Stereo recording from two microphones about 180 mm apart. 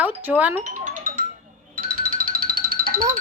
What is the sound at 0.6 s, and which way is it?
Music, 40° right (ahead or behind).